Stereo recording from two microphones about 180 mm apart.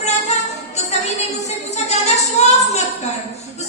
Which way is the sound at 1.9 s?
35° left (ahead or behind).